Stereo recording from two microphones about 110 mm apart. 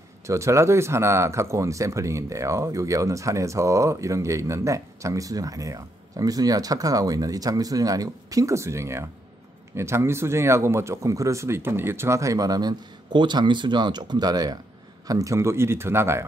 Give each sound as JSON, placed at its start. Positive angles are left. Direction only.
{"t": 0.3, "sound": "speech", "side_deg": -25}